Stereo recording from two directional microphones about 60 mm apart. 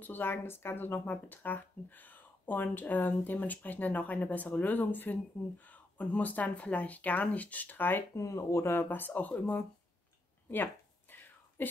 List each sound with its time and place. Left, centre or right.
0.0 s speech: left
8.2 s speech: left
10.5 s a sound: left